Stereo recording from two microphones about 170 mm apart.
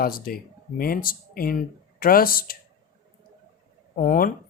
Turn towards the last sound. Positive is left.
turn(degrees=55)  # may be behind; listen again after turning